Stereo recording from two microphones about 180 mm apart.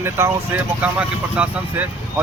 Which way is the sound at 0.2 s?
15° right (ahead or behind).